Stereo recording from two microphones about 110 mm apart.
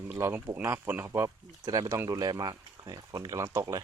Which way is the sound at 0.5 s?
20° right (ahead or behind).